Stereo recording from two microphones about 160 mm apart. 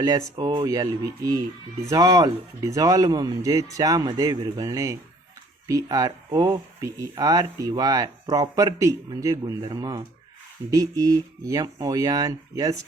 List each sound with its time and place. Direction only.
0.0 s speech: 25° right (ahead or behind)